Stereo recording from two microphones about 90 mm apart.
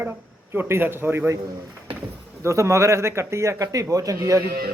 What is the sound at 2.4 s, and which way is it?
Speech, 35° right (ahead or behind).